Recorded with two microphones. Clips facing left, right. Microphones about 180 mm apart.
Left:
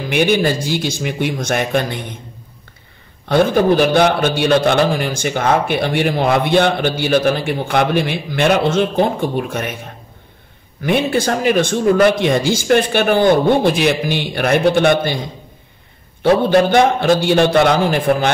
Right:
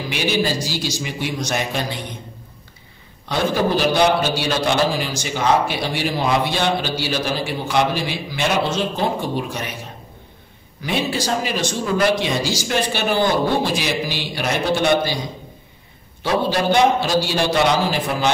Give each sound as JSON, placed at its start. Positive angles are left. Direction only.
{"t": 0.1, "sound": "a man's voice", "side_deg": 55}
{"t": 3.3, "sound": "a man's voice", "side_deg": 55}
{"t": 10.8, "sound": "a man's voice", "side_deg": 55}